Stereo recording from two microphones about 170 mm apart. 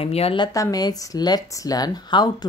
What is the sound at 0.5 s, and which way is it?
Speech, 20° left (ahead or behind).